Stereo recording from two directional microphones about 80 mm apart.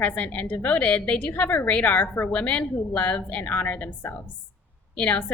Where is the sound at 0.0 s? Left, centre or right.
Centre.